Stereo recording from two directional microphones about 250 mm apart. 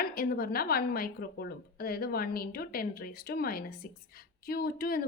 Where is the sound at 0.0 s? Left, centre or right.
Left.